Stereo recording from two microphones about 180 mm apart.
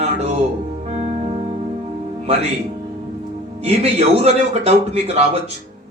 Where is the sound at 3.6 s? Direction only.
35° right (ahead or behind).